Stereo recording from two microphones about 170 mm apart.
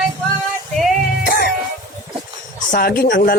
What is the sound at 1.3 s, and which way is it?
Music, 60° left (ahead or behind).